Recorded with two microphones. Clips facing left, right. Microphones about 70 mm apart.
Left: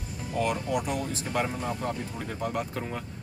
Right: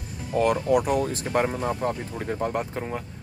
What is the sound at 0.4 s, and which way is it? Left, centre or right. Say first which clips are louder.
Speech: right 7 dB; right.